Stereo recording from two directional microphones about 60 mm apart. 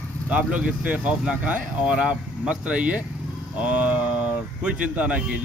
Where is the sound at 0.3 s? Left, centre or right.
Right.